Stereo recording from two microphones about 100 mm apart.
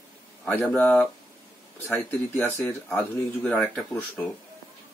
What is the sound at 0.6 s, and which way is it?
Speech, 5° left (ahead or behind).